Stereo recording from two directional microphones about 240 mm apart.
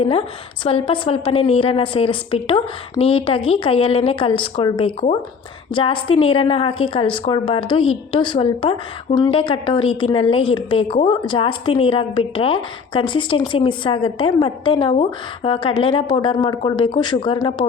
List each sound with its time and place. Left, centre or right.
0.0 s a woman's voice: left